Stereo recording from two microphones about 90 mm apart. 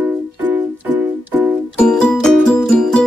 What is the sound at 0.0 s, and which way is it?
Music, 20° right (ahead or behind).